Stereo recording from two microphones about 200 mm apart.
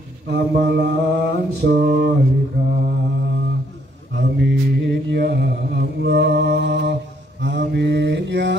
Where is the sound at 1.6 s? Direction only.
50° right (ahead or behind).